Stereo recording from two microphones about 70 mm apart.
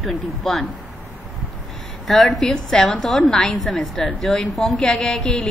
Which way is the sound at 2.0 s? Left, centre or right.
Centre.